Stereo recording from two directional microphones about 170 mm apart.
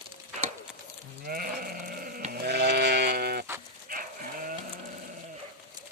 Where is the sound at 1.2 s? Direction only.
60° right (ahead or behind).